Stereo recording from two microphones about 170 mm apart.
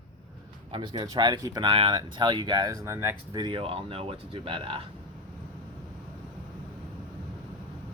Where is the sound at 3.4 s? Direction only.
30° right (ahead or behind).